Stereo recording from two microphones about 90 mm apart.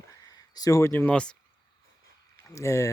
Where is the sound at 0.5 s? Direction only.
40° left (ahead or behind); by 1.4 s 10° left (ahead or behind).